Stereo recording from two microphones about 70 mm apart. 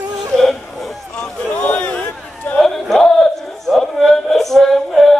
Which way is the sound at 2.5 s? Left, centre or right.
Centre.